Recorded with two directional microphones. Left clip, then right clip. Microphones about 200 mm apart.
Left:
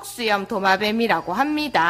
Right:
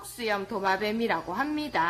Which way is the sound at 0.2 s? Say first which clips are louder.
Left 8 dB; 30° left (ahead or behind).